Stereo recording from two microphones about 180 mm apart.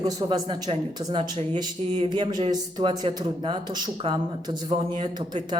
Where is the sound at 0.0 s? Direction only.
20° right (ahead or behind).